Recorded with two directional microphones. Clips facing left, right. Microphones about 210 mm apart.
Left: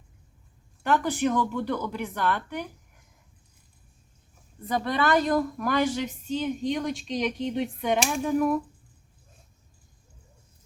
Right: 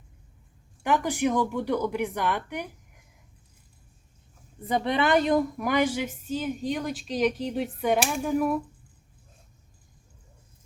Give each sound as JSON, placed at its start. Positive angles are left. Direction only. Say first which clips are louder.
{"t": 0.8, "sound": "a woman's voice", "louder": "even", "side_deg": -10}
{"t": 4.7, "sound": "a woman's voice", "louder": "right 1 dB", "side_deg": -20}